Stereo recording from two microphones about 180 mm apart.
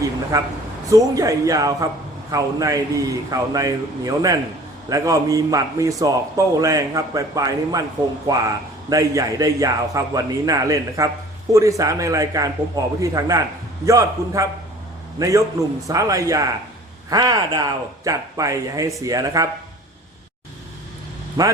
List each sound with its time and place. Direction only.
0.0 s a sound: 20° right (ahead or behind)
0.9 s a man's voice: 20° right (ahead or behind)
21.4 s a man's voice: 20° right (ahead or behind)